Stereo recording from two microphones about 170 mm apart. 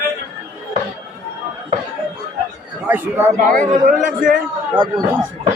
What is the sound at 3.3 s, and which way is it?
Speech, 50° right (ahead or behind).